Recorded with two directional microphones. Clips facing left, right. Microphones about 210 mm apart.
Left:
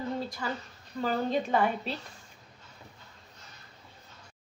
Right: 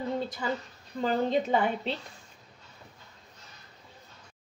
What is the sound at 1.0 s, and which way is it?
Speech, 20° right (ahead or behind).